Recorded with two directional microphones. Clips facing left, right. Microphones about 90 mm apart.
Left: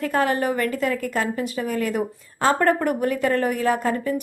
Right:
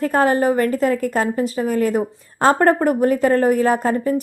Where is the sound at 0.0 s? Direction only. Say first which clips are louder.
Right 5 dB; 35° right (ahead or behind).